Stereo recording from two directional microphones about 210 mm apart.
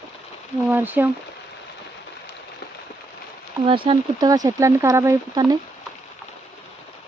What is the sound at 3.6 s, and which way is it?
Speech, 25° right (ahead or behind).